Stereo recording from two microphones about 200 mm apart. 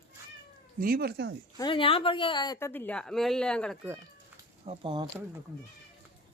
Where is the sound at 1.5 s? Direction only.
25° left (ahead or behind); by 3.7 s 5° left (ahead or behind).